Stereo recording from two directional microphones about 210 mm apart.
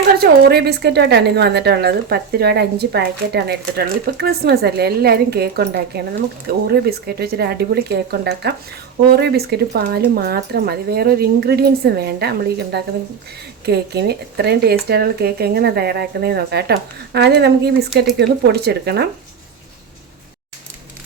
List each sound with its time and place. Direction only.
0.2 s a woman's voice: 50° right (ahead or behind)